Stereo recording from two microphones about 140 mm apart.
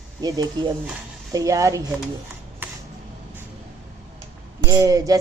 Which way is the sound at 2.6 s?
15° right (ahead or behind).